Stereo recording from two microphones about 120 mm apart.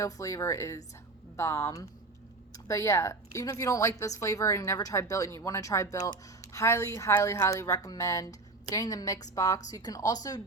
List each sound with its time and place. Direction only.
0.0 s a woman's voice: 25° left (ahead or behind)